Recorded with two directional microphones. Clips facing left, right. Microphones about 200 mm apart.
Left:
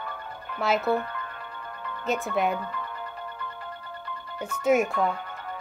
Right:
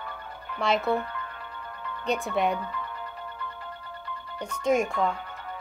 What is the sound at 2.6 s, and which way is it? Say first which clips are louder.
Music: left 1 dB; 50° left (ahead or behind).